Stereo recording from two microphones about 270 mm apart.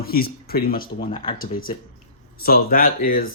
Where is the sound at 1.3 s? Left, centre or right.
Left.